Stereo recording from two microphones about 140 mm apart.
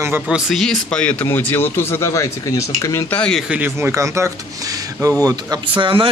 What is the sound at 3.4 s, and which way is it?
Speech, 15° right (ahead or behind).